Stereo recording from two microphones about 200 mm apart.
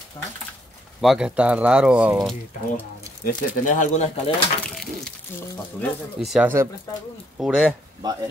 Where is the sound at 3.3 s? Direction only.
40° left (ahead or behind).